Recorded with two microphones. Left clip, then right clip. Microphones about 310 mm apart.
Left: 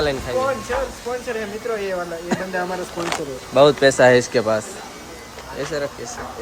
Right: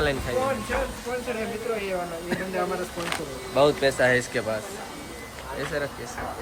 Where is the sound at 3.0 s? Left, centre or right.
Left.